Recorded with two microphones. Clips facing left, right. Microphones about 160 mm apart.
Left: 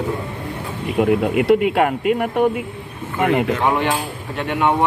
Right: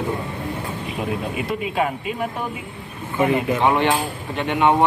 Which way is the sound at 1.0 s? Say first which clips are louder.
Left 10 dB; 70° left (ahead or behind).